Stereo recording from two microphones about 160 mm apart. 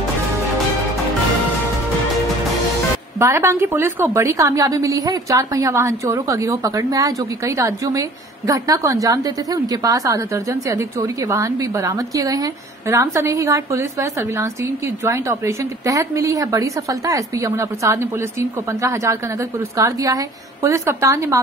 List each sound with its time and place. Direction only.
3.2 s a woman's voice: 15° right (ahead or behind)